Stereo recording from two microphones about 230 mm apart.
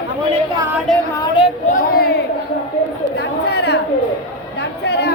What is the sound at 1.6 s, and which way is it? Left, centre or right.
Speech, left.